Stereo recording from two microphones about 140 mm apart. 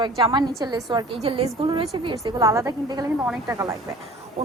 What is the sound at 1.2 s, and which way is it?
Speech, 40° right (ahead or behind).